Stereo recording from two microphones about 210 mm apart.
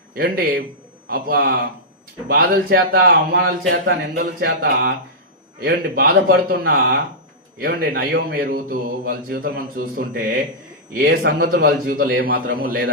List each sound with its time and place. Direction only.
0.1 s a man's voice: 50° right (ahead or behind)